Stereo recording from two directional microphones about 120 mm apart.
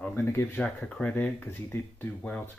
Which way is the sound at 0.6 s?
10° left (ahead or behind).